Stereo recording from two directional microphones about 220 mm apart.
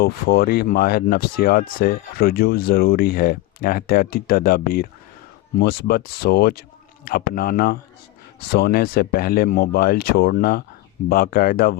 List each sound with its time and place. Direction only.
0.0 s speech: 45° left (ahead or behind)